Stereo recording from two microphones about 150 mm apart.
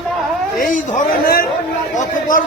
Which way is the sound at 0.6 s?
70° left (ahead or behind).